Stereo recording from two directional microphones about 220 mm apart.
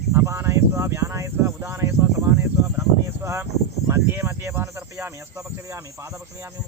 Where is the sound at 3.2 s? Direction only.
10° right (ahead or behind).